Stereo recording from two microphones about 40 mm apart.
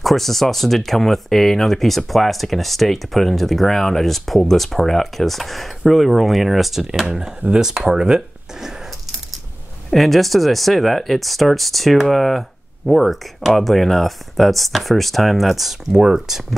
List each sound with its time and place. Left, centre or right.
0.0 s speech: centre
7.1 s speech: centre
9.8 s speech: centre